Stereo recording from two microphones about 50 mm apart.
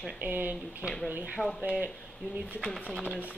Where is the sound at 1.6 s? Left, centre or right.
Right.